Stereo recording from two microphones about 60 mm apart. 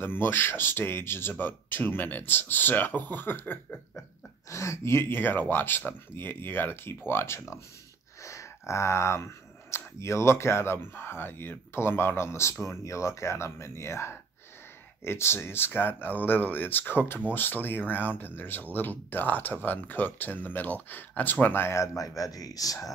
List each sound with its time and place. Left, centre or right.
0.0 s speech: left
4.5 s speech: left
21.6 s speech: left